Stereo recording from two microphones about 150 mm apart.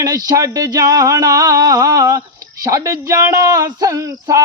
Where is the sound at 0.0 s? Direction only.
25° right (ahead or behind).